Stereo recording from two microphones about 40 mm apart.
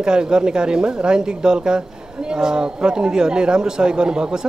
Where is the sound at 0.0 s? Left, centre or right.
Right.